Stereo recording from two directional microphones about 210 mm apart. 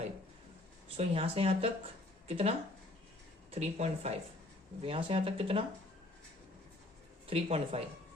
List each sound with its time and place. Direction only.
0.9 s speech: 25° right (ahead or behind)
7.3 s speech: 25° right (ahead or behind)